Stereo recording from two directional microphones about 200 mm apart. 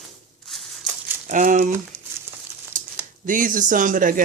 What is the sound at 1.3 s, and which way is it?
Speech, 40° right (ahead or behind).